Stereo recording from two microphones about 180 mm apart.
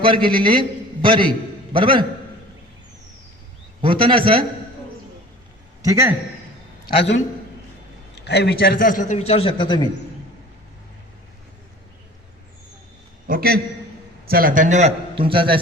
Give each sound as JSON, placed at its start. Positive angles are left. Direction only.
{"t": 0.0, "sound": "a man's voice", "side_deg": -30}
{"t": 3.8, "sound": "a man's voice", "side_deg": -30}
{"t": 5.8, "sound": "a man's voice", "side_deg": -15}
{"t": 6.8, "sound": "a man's voice", "side_deg": 70}
{"t": 13.2, "sound": "a man's voice", "side_deg": -55}